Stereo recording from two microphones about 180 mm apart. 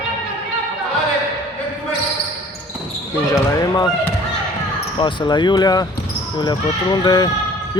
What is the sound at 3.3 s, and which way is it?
Speech, 20° left (ahead or behind).